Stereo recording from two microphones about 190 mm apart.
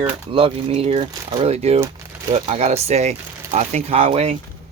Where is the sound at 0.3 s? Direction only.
30° right (ahead or behind).